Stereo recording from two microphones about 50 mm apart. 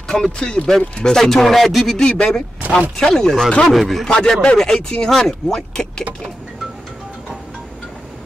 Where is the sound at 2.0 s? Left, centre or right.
Centre.